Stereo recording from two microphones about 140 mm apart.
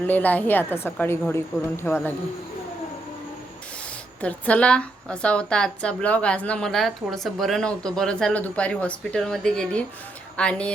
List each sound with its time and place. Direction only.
0.0 s a woman's voice: 10° left (ahead or behind)
4.2 s a woman's voice: 10° left (ahead or behind)